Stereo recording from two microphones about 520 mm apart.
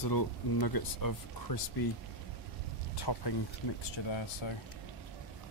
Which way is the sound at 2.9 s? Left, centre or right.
Left.